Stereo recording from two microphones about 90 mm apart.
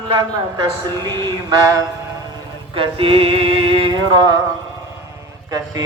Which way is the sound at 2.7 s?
85° right.